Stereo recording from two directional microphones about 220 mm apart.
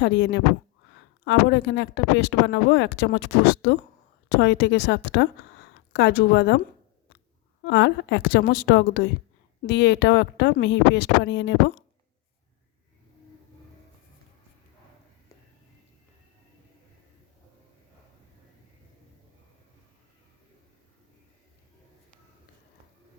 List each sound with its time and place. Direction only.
0.0 s speech: 50° left (ahead or behind)
7.6 s speech: 55° left (ahead or behind)